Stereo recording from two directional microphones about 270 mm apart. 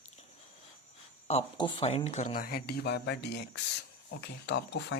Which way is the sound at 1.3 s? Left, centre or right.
Centre.